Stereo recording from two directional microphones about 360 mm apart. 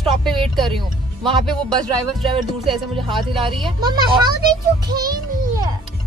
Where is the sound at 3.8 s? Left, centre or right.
Centre.